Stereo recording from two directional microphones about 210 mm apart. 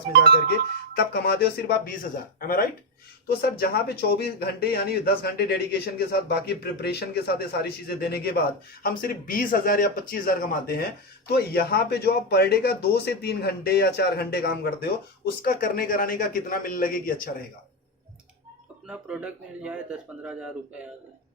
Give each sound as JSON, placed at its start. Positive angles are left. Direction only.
{"t": 0.1, "sound": "speech", "side_deg": -50}
{"t": 0.9, "sound": "a man's voice", "side_deg": 50}
{"t": 3.2, "sound": "a man's voice", "side_deg": 50}
{"t": 18.9, "sound": "speech", "side_deg": -5}